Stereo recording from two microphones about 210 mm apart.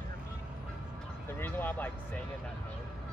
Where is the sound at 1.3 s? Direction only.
10° left (ahead or behind).